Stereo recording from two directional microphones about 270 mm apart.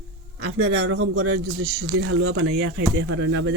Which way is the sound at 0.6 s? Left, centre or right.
Right.